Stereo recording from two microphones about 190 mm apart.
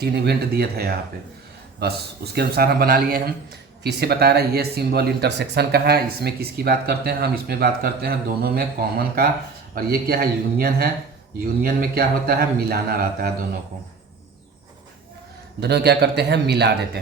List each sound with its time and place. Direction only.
0.0 s speech: 60° right (ahead or behind)
15.6 s speech: 60° right (ahead or behind)